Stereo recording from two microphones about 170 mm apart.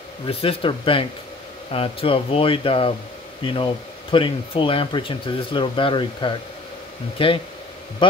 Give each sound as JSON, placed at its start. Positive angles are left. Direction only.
{"t": 0.3, "sound": "speech", "side_deg": 35}
{"t": 4.1, "sound": "speech", "side_deg": 30}